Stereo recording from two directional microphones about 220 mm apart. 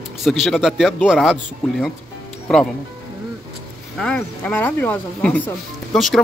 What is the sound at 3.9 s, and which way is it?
Speech, 5° left (ahead or behind).